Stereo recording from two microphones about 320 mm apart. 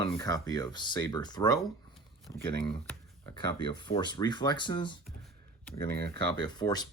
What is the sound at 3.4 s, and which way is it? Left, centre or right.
Speech, centre.